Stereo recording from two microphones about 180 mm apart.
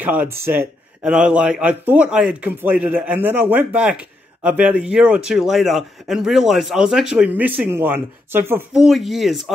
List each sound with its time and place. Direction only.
0.0 s speech: 10° right (ahead or behind)
8.8 s speech: centre (ahead or behind)